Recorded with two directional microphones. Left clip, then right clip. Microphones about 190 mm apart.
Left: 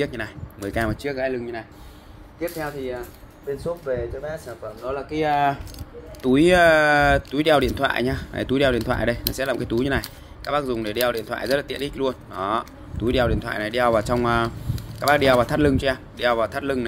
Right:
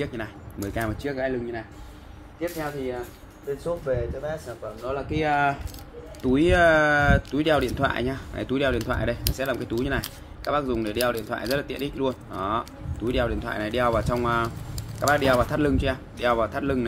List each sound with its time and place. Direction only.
0.0 s speech: 40° left (ahead or behind)